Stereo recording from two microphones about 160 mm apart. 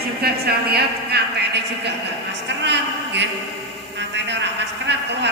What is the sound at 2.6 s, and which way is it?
Speech, 90° right.